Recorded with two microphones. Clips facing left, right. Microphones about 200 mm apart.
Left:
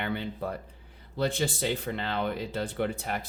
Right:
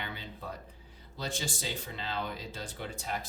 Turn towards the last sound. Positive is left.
turn(degrees=60)  # may be behind; listen again after turning